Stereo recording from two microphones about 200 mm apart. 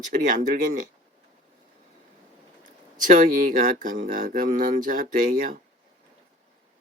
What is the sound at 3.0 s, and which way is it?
Speech, 40° right (ahead or behind).